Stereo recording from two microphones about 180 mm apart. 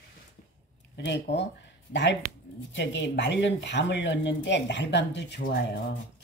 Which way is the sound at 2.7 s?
85° left.